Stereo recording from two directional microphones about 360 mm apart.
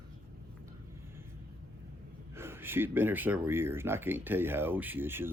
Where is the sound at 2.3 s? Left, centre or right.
Centre.